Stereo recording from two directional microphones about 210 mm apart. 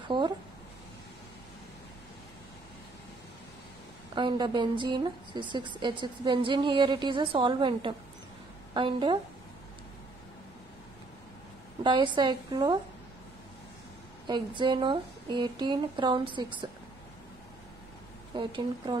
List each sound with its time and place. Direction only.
4.1 s a woman's voice: 20° right (ahead or behind)
11.8 s a woman's voice: 20° right (ahead or behind)
14.2 s a woman's voice: 20° right (ahead or behind)
18.3 s a woman's voice: 20° right (ahead or behind)